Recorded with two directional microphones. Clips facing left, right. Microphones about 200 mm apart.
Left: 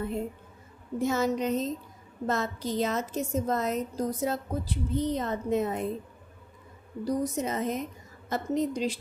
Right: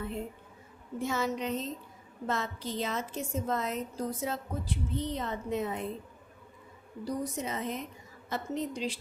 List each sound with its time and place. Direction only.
0.9 s a woman's voice: 40° left (ahead or behind)
7.0 s a woman's voice: 45° left (ahead or behind)